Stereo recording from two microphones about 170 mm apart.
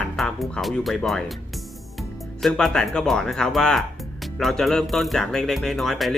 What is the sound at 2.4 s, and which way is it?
Speech, 5° left (ahead or behind).